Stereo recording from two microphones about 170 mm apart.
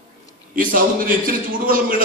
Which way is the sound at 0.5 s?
55° right (ahead or behind).